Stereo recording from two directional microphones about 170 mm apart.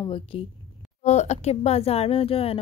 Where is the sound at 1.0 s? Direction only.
40° left (ahead or behind).